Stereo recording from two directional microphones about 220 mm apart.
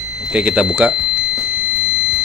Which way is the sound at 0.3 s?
5° right (ahead or behind).